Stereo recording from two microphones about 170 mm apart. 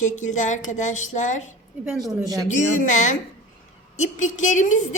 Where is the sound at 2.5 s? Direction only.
45° left (ahead or behind).